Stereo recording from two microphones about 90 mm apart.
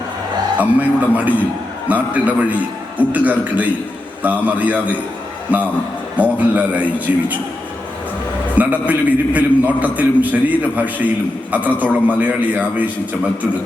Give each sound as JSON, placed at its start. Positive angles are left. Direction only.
{"t": 0.6, "sound": "a man's voice", "side_deg": -20}
{"t": 8.5, "sound": "a man's voice", "side_deg": -15}